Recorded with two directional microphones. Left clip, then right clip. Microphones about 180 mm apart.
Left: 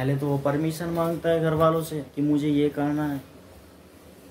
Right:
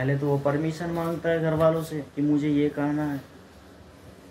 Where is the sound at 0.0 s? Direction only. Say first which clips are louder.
Right 1 dB; 10° left (ahead or behind).